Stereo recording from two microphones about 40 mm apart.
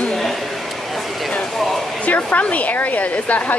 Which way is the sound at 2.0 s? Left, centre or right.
Left.